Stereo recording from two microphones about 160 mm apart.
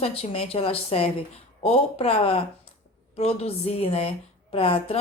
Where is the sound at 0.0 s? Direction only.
40° left (ahead or behind).